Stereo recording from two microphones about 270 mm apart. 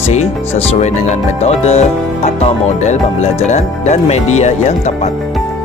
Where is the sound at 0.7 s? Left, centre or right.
Left.